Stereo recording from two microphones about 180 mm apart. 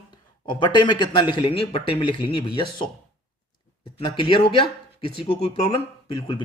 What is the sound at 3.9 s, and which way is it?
Speech, 30° left (ahead or behind).